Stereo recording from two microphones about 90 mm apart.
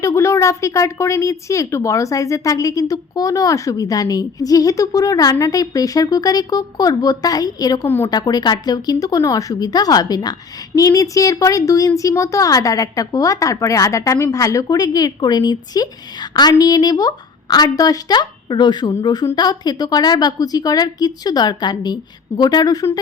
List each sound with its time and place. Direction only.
0.0 s speech: 30° left (ahead or behind)
7.9 s speech: 25° left (ahead or behind)
8.1 s a woman's voice: 50° left (ahead or behind)